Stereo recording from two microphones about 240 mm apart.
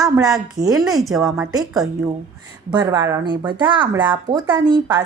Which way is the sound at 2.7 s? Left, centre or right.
Centre.